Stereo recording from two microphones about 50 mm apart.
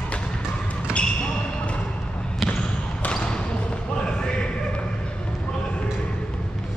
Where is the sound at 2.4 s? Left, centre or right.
Centre.